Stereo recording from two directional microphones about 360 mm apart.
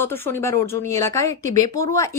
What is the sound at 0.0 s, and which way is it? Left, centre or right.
Speech, centre.